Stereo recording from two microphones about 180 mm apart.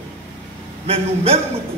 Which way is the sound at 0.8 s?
35° right (ahead or behind).